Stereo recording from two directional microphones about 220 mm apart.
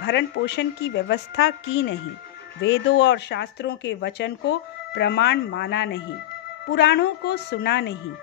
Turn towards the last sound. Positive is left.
turn(degrees=50)  # may be behind; listen again after turning